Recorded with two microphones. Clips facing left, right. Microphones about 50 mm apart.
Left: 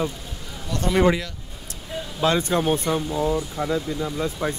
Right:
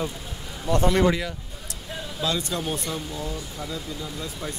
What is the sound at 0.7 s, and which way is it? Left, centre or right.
Speech, right.